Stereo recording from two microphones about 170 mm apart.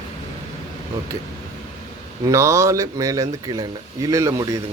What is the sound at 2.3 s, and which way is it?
Speech, 15° right (ahead or behind).